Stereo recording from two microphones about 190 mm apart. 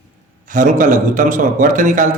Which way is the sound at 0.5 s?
45° right (ahead or behind).